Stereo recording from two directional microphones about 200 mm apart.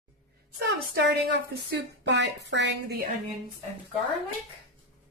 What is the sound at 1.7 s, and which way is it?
A woman's voice, 60° right (ahead or behind).